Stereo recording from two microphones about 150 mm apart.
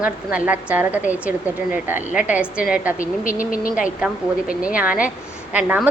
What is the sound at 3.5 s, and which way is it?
Speech, 65° left (ahead or behind).